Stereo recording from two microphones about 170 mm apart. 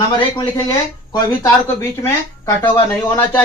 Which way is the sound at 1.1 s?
20° left (ahead or behind).